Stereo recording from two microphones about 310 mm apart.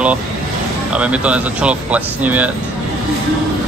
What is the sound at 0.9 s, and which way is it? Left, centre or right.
Speech, centre.